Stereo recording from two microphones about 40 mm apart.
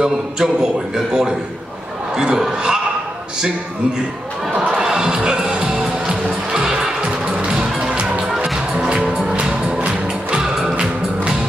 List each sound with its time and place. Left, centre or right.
0.0 s speech: centre
4.7 s music: centre
8.7 s music: right
10.0 s music: centre